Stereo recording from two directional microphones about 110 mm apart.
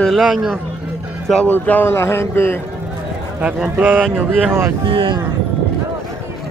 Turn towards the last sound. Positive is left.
turn(degrees=-50)  # may be behind; listen again after turning